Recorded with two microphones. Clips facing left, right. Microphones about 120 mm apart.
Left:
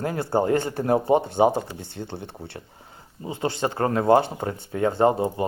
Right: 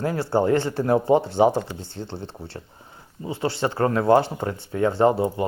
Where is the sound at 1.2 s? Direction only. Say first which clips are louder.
Right 1 dB; 55° left (ahead or behind).